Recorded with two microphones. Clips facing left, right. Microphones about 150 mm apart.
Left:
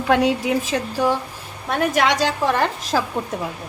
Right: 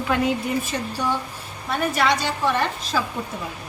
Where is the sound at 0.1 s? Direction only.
85° left.